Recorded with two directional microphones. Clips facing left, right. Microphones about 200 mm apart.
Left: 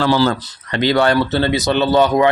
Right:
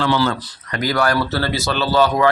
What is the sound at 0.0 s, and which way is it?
Speech, 35° left (ahead or behind).